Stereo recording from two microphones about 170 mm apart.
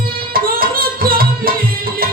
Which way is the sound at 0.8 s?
60° right (ahead or behind).